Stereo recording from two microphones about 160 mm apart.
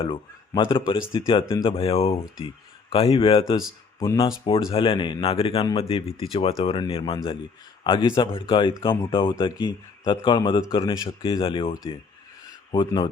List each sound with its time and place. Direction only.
0.0 s speech: 30° left (ahead or behind)